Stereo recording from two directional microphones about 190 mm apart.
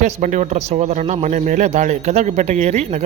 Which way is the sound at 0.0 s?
40° right (ahead or behind).